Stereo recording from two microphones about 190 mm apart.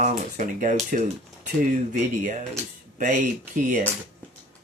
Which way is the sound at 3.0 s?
40° right (ahead or behind).